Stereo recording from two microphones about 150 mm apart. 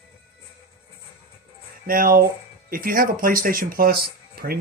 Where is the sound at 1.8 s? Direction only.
75° right (ahead or behind); by 4.6 s 90° right.